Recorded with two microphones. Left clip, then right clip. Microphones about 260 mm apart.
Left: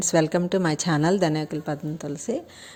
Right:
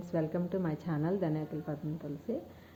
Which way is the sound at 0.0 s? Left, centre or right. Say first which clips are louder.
Left 13 dB; left.